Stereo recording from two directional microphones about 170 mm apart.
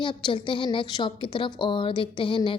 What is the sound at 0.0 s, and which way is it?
A woman's voice, 30° left (ahead or behind).